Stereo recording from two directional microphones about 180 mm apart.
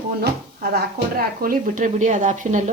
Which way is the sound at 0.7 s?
55° right (ahead or behind).